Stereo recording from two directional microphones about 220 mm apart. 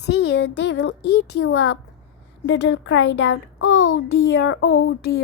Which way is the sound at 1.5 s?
75° left (ahead or behind).